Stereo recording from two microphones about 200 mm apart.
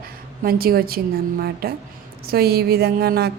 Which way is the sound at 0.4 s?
50° right (ahead or behind).